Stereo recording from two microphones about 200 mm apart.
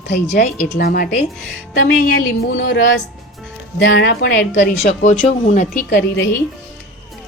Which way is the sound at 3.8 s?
55° left (ahead or behind).